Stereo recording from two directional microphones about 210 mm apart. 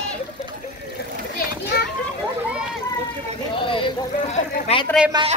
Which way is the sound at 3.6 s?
25° left (ahead or behind).